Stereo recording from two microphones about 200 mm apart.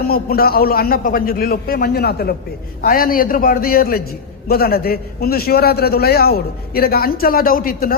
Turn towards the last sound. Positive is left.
turn(degrees=45)  # may be behind; listen again after turning